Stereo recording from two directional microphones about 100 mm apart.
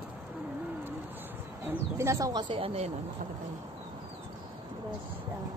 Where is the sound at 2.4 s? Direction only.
65° right (ahead or behind).